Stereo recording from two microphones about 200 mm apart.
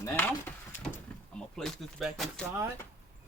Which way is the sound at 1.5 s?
Centre (ahead or behind).